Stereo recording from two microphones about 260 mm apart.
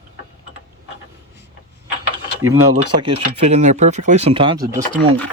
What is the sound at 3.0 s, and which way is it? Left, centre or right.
Speech, right.